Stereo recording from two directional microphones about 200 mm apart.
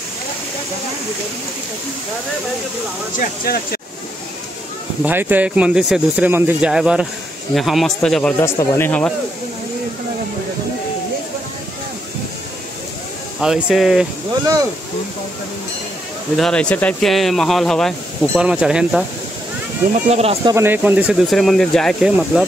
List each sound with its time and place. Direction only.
3.2 s speech: 50° left (ahead or behind)
5.0 s speech: 10° right (ahead or behind); by 9.1 s 10° left (ahead or behind)
13.4 s speech: centre (ahead or behind)
16.3 s speech: 5° left (ahead or behind)
20.1 s speech: 30° right (ahead or behind)
20.5 s speech: 10° right (ahead or behind)